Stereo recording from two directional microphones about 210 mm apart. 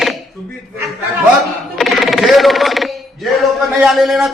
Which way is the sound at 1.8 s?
Centre (ahead or behind).